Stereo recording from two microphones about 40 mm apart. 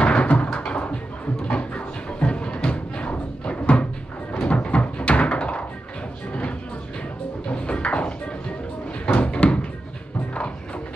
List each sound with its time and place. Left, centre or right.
0.0 s cupboard open or close: left
1.4 s music: left
7.4 s music: left
9.0 s cupboard open or close: left